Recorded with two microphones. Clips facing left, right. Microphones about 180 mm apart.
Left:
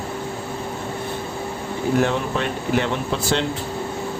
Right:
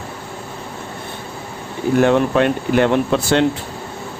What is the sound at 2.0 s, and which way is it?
Speech, 60° right (ahead or behind).